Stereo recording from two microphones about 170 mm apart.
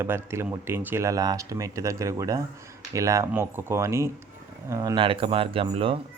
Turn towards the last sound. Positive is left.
turn(degrees=-30)  # may be behind; listen again after turning